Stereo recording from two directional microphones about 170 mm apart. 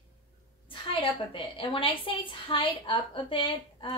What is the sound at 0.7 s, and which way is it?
A woman's voice, 30° left (ahead or behind).